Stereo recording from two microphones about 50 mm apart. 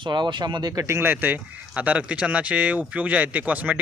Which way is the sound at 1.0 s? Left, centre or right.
Right.